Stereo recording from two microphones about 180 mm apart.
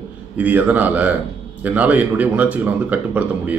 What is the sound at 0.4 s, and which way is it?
Speech, 10° right (ahead or behind).